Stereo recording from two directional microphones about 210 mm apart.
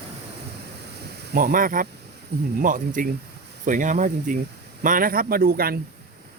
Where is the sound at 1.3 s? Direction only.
40° right (ahead or behind).